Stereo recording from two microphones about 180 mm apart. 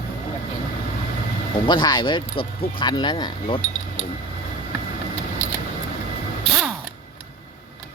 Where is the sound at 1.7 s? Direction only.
25° left (ahead or behind).